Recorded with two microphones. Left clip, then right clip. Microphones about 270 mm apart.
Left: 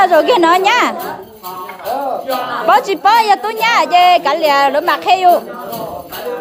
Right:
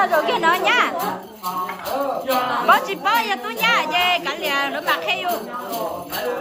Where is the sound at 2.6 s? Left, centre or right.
Left.